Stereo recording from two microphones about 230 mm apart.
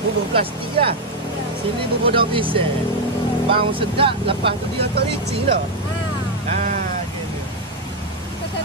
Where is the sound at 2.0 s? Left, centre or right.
Right.